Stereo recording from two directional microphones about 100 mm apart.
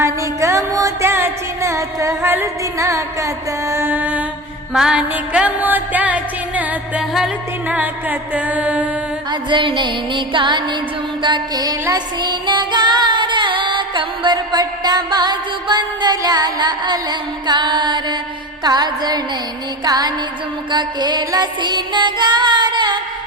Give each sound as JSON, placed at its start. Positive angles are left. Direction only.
{"t": 0.0, "sound": "music", "side_deg": -30}
{"t": 4.7, "sound": "music", "side_deg": -5}
{"t": 9.3, "sound": "music", "side_deg": -55}